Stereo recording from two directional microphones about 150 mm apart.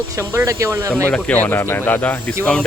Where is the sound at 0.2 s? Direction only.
20° right (ahead or behind).